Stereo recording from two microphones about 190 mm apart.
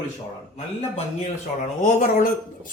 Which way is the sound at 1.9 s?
45° left (ahead or behind).